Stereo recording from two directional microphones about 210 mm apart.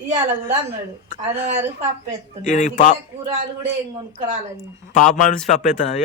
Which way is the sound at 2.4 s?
35° left (ahead or behind).